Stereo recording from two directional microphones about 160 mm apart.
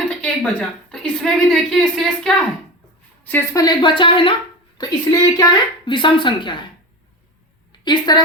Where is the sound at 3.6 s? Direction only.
30° left (ahead or behind).